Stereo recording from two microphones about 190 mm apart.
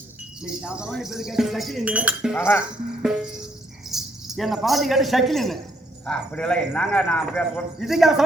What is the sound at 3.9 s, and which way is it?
A man's voice, centre (ahead or behind).